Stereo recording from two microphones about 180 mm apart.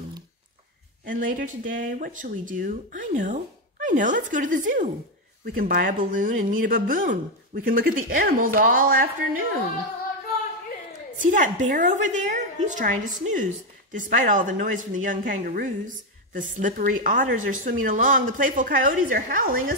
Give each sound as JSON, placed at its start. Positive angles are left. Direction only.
{"t": 1.0, "sound": "speech", "side_deg": -50}
{"t": 11.1, "sound": "speech", "side_deg": -45}